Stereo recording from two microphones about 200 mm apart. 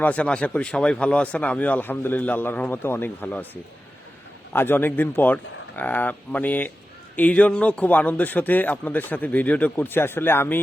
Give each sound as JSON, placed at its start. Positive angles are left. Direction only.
{"t": 0.0, "sound": "speech", "side_deg": 5}